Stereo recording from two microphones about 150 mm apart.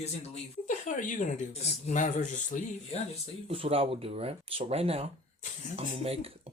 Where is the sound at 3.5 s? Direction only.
40° right (ahead or behind).